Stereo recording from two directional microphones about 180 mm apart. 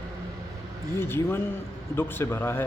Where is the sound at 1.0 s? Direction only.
10° left (ahead or behind).